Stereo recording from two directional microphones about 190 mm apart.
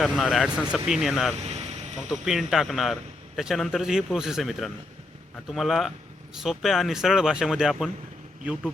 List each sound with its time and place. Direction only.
0.0 s a man's voice: centre (ahead or behind)
1.4 s vehicle: 35° right (ahead or behind)
2.0 s a man's voice: centre (ahead or behind)